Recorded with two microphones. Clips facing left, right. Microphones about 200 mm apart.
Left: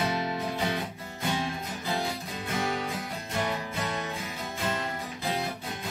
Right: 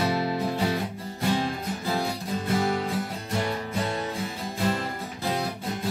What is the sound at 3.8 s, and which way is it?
Music, 35° right (ahead or behind).